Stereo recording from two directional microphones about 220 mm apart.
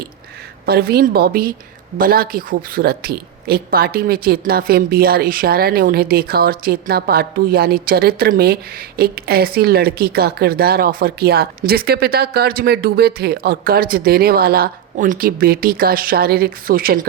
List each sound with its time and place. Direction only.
0.6 s speech: 45° right (ahead or behind)